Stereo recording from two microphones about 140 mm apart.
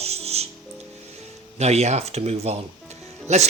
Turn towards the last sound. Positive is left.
turn(degrees=-55)  # may be behind; listen again after turning